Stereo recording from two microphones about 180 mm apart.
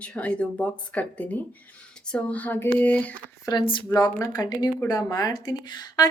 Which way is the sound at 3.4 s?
25° left (ahead or behind).